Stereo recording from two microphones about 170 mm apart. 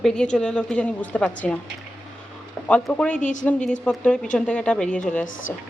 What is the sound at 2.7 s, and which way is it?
Speech, 5° left (ahead or behind).